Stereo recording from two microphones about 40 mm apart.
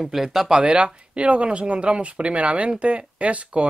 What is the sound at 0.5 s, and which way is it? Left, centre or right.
Speech, right.